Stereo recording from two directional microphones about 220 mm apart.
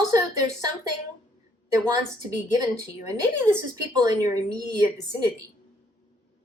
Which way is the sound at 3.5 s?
15° right (ahead or behind).